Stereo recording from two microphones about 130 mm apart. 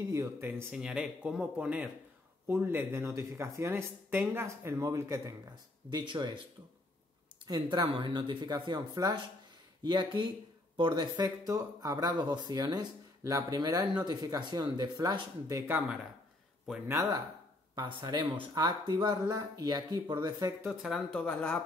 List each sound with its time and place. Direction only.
0.1 s speech: 20° right (ahead or behind); by 6.4 s 35° right (ahead or behind)
7.4 s speech: 30° right (ahead or behind)
17.7 s speech: 35° right (ahead or behind)
21.1 s speech: 10° left (ahead or behind)